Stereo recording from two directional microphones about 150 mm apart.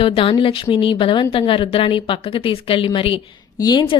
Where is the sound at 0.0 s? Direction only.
35° left (ahead or behind).